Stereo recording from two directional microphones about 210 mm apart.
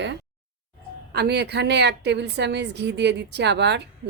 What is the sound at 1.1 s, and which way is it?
A woman's voice, 50° right (ahead or behind).